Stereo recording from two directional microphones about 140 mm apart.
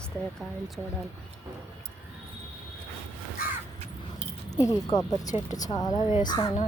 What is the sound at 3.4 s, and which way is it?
Crow, 90° left.